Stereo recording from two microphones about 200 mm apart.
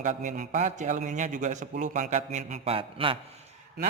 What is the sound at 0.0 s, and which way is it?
A man's voice, 40° right (ahead or behind).